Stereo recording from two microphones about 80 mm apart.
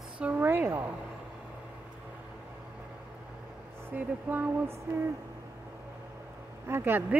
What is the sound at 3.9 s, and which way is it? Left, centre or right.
Music, right.